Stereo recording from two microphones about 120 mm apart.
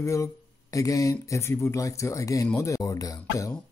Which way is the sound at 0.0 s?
25° left (ahead or behind).